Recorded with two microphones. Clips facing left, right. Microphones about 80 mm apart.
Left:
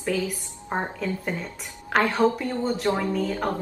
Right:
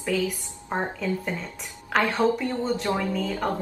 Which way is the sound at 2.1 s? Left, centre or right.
Centre.